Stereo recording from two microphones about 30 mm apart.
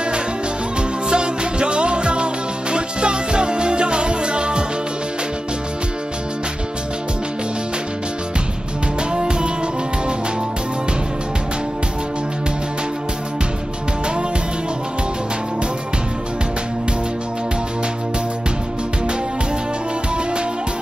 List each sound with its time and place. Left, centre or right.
1.1 s music: right
9.1 s music: right